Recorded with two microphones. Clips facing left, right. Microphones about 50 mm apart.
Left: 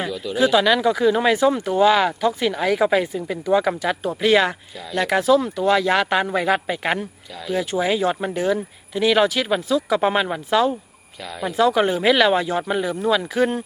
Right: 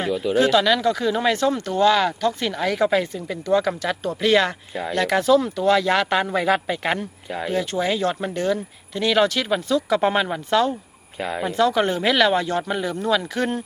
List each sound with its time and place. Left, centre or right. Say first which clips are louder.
0.1 s speech: right 5 dB; right
0.3 s speech: left 2 dB; centre
7.3 s speech: right 4 dB; right
7.5 s speech: left 3 dB; centre
11.2 s speech: right 6 dB; right
11.4 s speech: left 2 dB; centre